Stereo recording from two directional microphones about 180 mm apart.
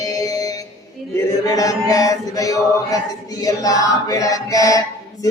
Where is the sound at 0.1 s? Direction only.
20° left (ahead or behind).